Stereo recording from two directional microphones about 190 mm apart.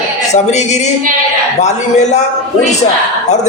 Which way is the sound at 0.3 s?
35° left (ahead or behind).